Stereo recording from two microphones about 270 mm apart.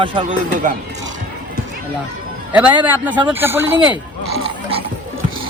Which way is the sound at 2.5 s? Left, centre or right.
Centre.